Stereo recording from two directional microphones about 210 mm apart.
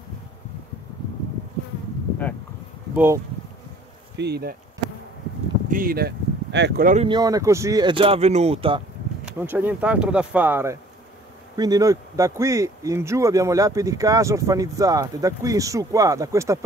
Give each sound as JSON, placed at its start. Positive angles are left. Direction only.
{"t": 4.2, "sound": "speech", "side_deg": -50}
{"t": 5.7, "sound": "speech", "side_deg": -40}
{"t": 7.1, "sound": "speech", "side_deg": -20}
{"t": 9.2, "sound": "a man's voice", "side_deg": -10}